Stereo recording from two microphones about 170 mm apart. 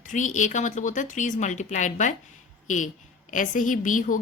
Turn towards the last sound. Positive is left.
turn(degrees=50)  # may be behind; listen again after turning